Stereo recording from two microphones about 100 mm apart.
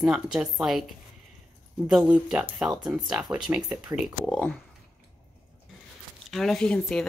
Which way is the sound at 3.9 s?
35° right (ahead or behind).